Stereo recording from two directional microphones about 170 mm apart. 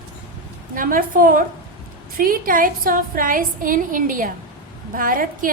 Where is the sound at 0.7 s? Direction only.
55° right (ahead or behind).